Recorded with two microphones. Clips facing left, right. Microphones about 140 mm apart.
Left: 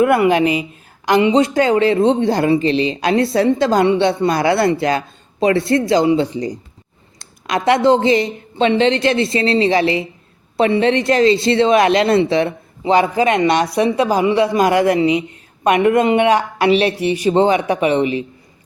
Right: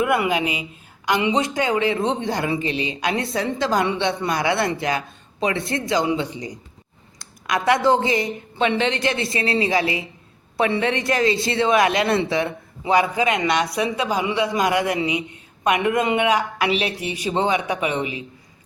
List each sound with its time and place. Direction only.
0.0 s a woman's voice: 50° left (ahead or behind)
1.0 s a woman's voice: 35° left (ahead or behind)
13.2 s a woman's voice: 50° left (ahead or behind); by 18.1 s 30° left (ahead or behind)